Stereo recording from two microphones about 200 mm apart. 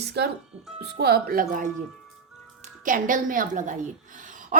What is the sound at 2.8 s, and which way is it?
Speech, 40° right (ahead or behind).